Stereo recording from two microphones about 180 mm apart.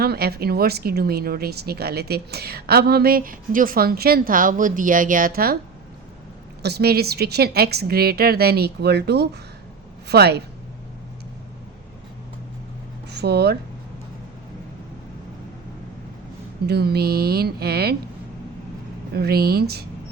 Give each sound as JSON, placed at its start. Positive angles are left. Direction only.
{"t": 0.0, "sound": "a woman's voice", "side_deg": -60}
{"t": 6.6, "sound": "a woman's voice", "side_deg": -65}
{"t": 13.1, "sound": "speech", "side_deg": -65}
{"t": 16.6, "sound": "a woman's voice", "side_deg": -60}
{"t": 19.1, "sound": "a woman's voice", "side_deg": -60}